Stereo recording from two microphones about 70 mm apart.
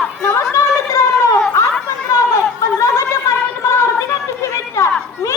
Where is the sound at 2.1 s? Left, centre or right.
Left.